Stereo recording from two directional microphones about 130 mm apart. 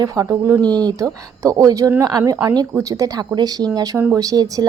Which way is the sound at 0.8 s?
25° right (ahead or behind).